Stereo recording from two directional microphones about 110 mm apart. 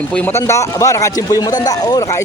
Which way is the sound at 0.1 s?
15° left (ahead or behind).